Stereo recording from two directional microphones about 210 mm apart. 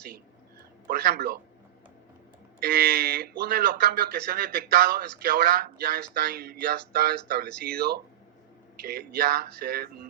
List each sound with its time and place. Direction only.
0.9 s speech: 50° right (ahead or behind)
2.6 s speech: 50° right (ahead or behind)